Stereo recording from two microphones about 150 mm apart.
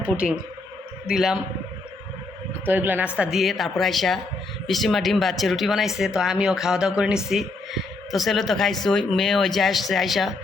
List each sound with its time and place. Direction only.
1.0 s speech: 5° right (ahead or behind)
2.6 s a woman's voice: 15° right (ahead or behind)